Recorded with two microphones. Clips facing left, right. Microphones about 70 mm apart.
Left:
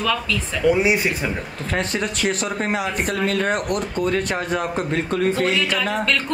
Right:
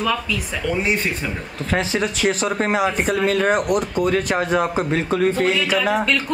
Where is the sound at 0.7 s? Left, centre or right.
Centre.